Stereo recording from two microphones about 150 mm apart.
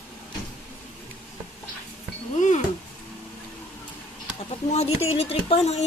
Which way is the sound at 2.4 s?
50° left (ahead or behind).